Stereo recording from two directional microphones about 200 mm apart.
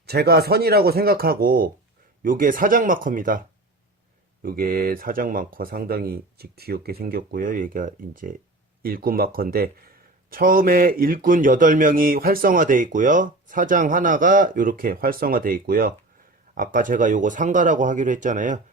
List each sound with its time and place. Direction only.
0.0 s speech: 55° right (ahead or behind)
4.4 s speech: 45° right (ahead or behind)